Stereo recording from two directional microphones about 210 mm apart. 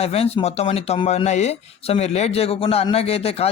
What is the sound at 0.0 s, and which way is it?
Speech, 30° left (ahead or behind).